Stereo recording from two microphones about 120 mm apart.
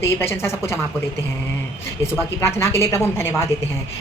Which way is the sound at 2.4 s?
20° left (ahead or behind).